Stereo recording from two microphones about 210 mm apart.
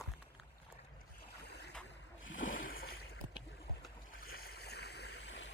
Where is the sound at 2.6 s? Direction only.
45° left (ahead or behind).